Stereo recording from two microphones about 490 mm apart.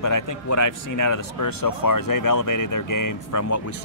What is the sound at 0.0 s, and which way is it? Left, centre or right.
Speech, left.